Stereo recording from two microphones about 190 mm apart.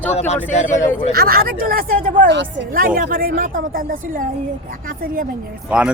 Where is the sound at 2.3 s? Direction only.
65° right (ahead or behind).